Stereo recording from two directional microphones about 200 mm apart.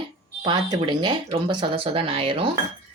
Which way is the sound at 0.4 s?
20° right (ahead or behind).